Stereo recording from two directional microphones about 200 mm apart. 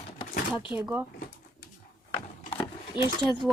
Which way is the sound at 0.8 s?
10° right (ahead or behind).